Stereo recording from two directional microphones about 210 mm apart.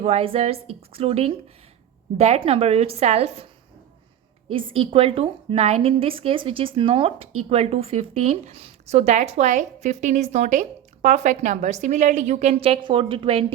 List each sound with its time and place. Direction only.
0.0 s a woman's voice: 25° right (ahead or behind)
4.8 s a woman's voice: 25° right (ahead or behind)